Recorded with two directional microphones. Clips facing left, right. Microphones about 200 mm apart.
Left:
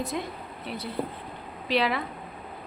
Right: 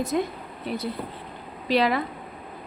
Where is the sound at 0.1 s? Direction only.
45° right (ahead or behind).